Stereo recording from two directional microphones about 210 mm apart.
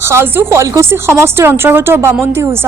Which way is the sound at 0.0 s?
10° right (ahead or behind).